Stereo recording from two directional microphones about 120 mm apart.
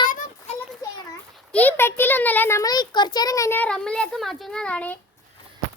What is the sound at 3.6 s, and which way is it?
A child's voice, 5° left (ahead or behind).